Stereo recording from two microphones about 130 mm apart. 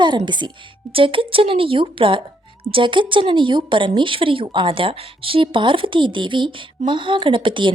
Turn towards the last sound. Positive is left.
turn(degrees=-40)  # may be behind; listen again after turning